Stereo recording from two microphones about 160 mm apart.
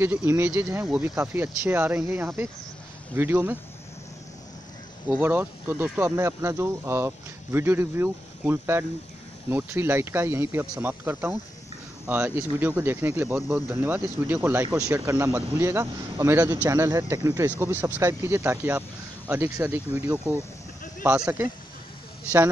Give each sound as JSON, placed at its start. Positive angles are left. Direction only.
{"t": 0.0, "sound": "speech", "side_deg": -15}
{"t": 5.0, "sound": "speech", "side_deg": -10}